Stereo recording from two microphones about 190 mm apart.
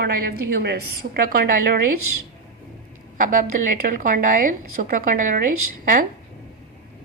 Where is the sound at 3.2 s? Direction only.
45° right (ahead or behind).